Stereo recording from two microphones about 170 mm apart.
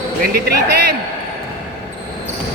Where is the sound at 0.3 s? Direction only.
65° right (ahead or behind).